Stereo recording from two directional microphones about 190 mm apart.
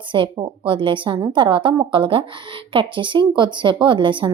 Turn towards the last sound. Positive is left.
turn(degrees=-25)  # may be behind; listen again after turning